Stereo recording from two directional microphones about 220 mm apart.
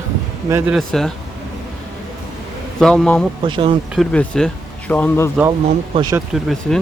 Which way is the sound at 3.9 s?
5° left (ahead or behind).